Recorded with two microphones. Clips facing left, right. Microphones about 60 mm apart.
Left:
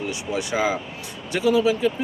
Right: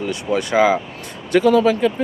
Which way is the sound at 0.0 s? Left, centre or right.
Right.